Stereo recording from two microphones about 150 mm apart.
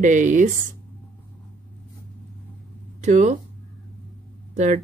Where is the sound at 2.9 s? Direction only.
50° right (ahead or behind).